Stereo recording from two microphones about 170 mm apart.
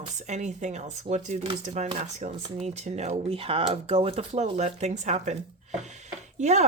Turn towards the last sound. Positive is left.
turn(degrees=-45)  # may be behind; listen again after turning